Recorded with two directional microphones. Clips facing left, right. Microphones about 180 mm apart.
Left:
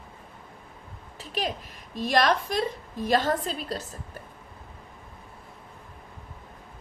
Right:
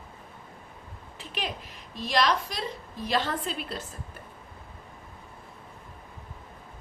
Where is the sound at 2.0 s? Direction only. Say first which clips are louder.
Left 3 dB; 50° left (ahead or behind).